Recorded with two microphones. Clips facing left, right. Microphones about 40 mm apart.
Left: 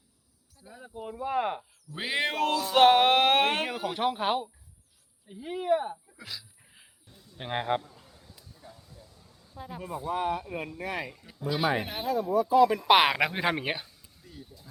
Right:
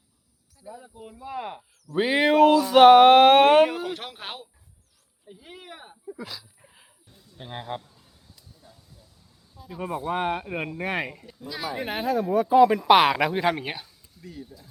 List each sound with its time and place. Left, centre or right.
0.7 s speech: centre
1.1 s cricket: left
2.0 s speech: centre
6.1 s a sound: centre
7.4 s speech: left
9.8 s speech: right
11.3 s speech: left
11.9 s speech: right
12.9 s speech: centre